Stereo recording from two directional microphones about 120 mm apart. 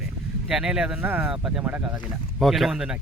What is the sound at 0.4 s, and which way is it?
Speech, 5° right (ahead or behind).